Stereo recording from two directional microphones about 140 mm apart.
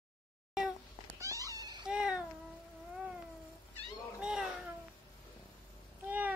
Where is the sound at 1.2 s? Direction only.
25° right (ahead or behind).